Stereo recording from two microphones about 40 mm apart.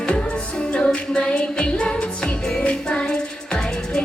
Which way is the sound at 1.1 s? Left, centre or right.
Left.